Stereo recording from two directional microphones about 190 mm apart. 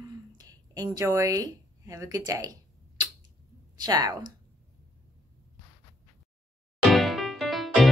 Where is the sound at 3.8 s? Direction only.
20° right (ahead or behind).